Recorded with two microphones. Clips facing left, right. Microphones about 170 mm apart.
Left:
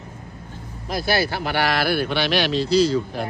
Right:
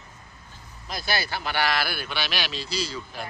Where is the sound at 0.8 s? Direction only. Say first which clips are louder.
Left 8 dB; 65° left (ahead or behind).